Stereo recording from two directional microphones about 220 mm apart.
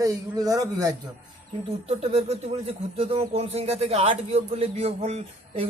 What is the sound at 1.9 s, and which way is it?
Speech, 30° right (ahead or behind).